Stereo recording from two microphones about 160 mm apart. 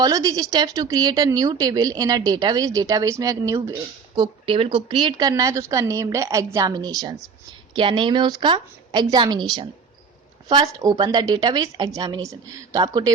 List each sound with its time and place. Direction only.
0.0 s a woman's voice: 25° right (ahead or behind)